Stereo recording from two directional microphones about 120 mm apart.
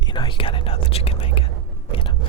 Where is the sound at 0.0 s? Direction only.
40° left (ahead or behind).